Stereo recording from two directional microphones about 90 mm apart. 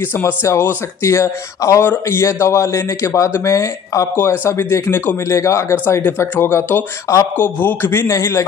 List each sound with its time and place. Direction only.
0.1 s speech: 30° left (ahead or behind)